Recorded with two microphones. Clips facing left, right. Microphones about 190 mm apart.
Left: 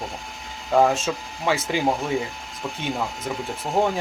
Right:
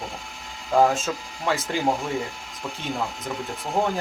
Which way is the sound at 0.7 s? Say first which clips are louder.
Left 1 dB; centre (ahead or behind).